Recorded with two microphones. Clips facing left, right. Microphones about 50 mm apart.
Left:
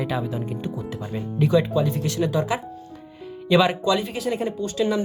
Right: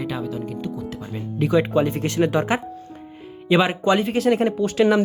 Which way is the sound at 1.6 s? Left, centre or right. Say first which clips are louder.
Right 3 dB; right.